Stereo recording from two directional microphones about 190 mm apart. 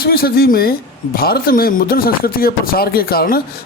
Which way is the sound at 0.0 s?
55° left (ahead or behind).